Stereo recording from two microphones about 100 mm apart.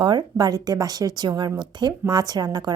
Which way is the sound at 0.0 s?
45° right (ahead or behind).